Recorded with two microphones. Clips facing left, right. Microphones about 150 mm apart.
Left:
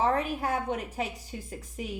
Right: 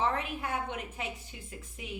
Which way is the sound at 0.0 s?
40° left (ahead or behind).